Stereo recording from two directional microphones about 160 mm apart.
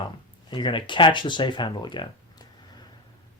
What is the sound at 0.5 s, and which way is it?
Speech, 30° left (ahead or behind).